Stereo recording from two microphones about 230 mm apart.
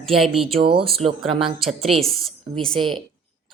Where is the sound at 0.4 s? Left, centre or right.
Right.